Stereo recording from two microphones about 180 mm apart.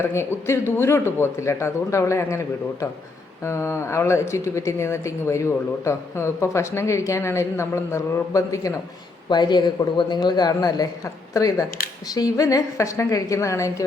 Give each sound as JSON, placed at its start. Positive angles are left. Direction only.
{"t": 0.0, "sound": "a man's voice", "side_deg": 15}